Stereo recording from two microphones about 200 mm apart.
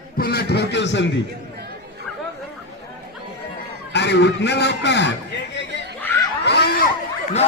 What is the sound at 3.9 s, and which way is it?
A man's voice, 60° left (ahead or behind).